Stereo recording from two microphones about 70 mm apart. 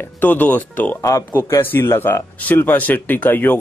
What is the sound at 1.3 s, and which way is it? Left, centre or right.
Speech, left.